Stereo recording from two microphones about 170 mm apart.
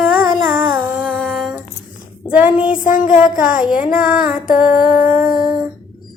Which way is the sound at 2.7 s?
55° left (ahead or behind).